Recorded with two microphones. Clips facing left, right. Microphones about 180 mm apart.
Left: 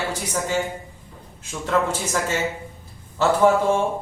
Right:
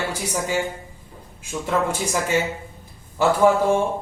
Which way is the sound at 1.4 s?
10° right (ahead or behind).